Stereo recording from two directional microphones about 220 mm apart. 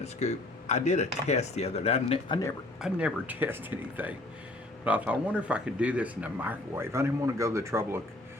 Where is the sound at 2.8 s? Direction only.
5° right (ahead or behind).